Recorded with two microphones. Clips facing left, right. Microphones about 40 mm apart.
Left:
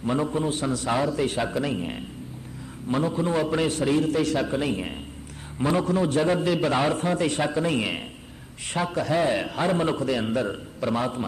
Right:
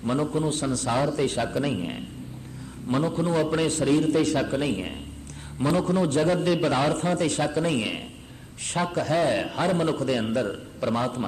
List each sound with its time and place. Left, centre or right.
0.0 s a man's voice: centre
7.3 s a man's voice: centre